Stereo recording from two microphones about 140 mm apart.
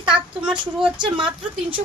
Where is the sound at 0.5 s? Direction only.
35° right (ahead or behind).